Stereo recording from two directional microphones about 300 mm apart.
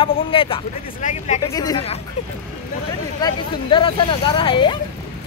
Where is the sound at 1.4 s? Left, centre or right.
Centre.